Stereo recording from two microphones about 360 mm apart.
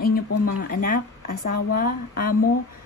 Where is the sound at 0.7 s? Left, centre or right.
Left.